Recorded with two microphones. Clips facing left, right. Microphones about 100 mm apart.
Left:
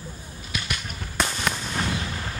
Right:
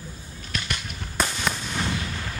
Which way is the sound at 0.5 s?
5° left (ahead or behind).